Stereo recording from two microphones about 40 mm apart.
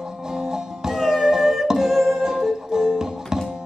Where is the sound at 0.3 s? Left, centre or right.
Centre.